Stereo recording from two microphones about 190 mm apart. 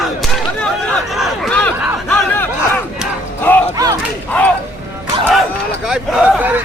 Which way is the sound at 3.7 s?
20° right (ahead or behind).